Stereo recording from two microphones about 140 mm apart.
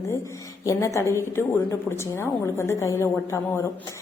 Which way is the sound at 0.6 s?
25° left (ahead or behind).